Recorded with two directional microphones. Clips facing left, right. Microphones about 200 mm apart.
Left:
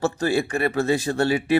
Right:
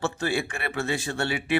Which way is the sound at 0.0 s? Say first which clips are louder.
Left 5 dB; 40° left (ahead or behind).